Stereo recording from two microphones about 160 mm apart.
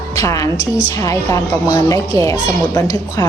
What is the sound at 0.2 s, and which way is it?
A woman's voice, 20° left (ahead or behind).